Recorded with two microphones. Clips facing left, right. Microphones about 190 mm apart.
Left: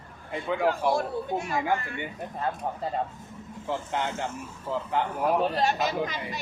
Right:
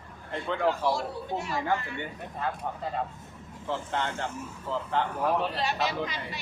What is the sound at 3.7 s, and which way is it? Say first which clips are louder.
Speech: left 1 dB; 10° left (ahead or behind).